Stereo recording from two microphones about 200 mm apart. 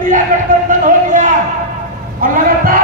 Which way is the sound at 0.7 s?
40° right (ahead or behind).